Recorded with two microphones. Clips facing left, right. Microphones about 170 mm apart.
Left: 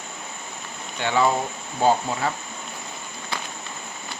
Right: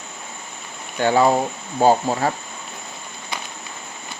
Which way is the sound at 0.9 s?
40° right (ahead or behind).